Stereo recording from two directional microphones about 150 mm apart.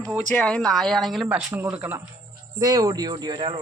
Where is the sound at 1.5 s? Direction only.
15° right (ahead or behind).